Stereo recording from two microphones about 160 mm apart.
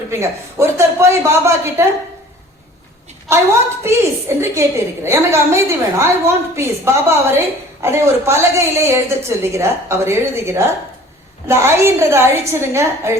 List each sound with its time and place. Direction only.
0.1 s speech: 15° right (ahead or behind)
3.3 s a woman's voice: 15° right (ahead or behind)